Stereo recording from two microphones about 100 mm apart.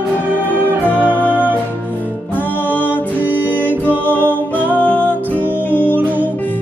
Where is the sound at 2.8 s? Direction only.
20° right (ahead or behind).